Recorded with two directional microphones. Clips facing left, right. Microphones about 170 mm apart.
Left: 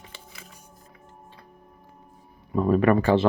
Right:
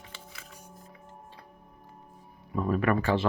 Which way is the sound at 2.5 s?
30° left (ahead or behind).